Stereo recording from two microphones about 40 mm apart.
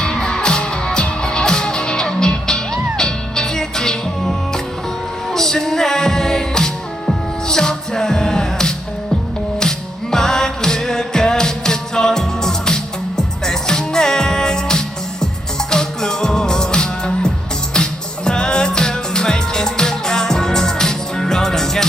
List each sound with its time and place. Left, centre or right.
0.0 s music: centre